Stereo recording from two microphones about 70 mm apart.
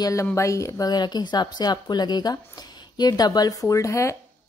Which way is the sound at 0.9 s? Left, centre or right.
Left.